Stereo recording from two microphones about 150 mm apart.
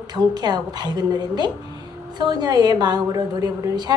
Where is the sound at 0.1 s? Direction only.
30° right (ahead or behind).